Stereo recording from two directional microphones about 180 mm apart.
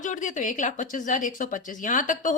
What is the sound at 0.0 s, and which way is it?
A woman's voice, 45° left (ahead or behind).